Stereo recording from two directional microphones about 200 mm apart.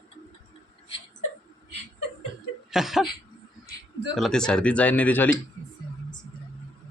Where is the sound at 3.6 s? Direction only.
60° right (ahead or behind).